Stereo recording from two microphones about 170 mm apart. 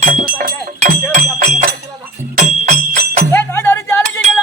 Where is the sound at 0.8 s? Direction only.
50° right (ahead or behind).